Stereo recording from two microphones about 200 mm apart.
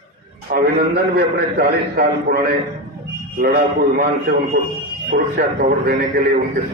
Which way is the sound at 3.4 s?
50° right (ahead or behind).